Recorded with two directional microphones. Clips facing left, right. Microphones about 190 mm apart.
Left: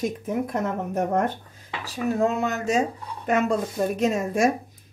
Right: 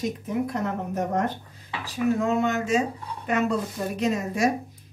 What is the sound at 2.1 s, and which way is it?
Speech, 40° left (ahead or behind).